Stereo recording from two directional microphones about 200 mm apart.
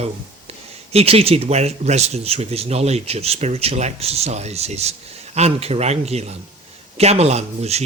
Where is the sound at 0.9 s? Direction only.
30° right (ahead or behind).